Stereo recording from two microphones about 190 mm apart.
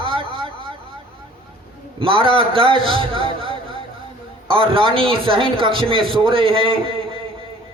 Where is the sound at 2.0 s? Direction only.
30° right (ahead or behind).